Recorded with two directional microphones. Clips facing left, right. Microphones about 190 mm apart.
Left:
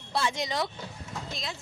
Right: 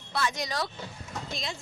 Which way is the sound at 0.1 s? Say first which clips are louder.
Left 1 dB; 25° left (ahead or behind).